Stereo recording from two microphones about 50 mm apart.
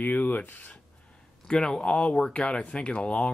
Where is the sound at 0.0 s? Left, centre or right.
Left.